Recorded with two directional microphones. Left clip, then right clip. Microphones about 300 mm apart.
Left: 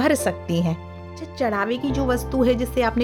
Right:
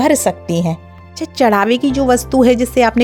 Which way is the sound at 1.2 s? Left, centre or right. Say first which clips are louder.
Right 11 dB; right.